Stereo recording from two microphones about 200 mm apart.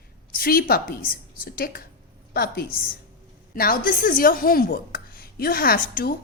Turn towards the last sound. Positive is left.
turn(degrees=50)  # may be behind; listen again after turning